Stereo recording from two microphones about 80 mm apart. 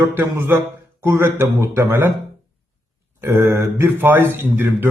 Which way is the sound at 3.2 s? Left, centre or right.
Right.